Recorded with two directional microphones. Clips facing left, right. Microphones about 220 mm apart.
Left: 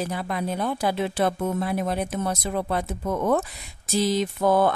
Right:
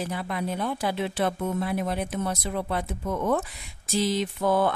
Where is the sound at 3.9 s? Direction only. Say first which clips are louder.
Left 2 dB; 40° left (ahead or behind).